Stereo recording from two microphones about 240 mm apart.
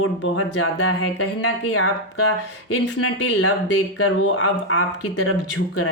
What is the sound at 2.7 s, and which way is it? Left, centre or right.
Speech, left.